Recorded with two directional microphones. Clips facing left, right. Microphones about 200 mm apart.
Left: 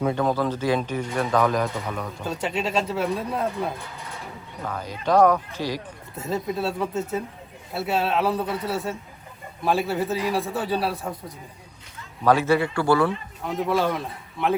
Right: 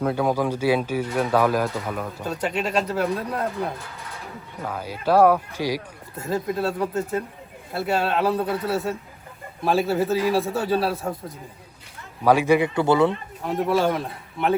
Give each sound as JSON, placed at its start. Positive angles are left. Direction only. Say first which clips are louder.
{"t": 0.0, "sound": "speech", "louder": "right 1 dB", "side_deg": -5}
{"t": 6.1, "sound": "speech", "louder": "right 2 dB", "side_deg": 0}
{"t": 12.2, "sound": "speech", "louder": "right 2 dB", "side_deg": -10}
{"t": 13.7, "sound": "speech", "louder": "right 2 dB", "side_deg": 0}